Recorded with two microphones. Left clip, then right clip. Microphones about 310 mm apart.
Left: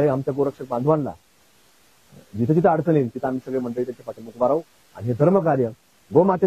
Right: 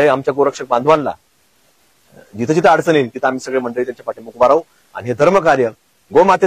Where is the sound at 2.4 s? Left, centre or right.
Centre.